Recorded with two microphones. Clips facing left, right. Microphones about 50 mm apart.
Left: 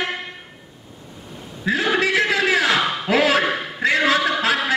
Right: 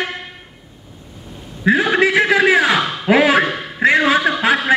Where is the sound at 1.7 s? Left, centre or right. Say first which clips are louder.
Right 7 dB; right.